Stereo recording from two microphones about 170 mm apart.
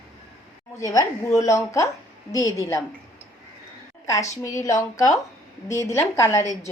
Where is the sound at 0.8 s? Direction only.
20° left (ahead or behind).